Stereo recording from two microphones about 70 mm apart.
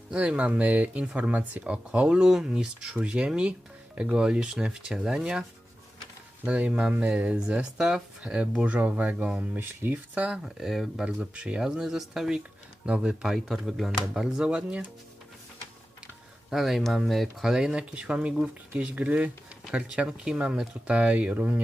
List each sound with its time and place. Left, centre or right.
0.1 s speech: centre
10.2 s speech: centre
11.0 s speech: centre
16.5 s speech: centre; by 21.6 s right